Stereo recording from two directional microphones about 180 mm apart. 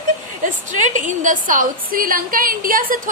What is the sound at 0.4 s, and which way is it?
A woman's voice, 45° right (ahead or behind).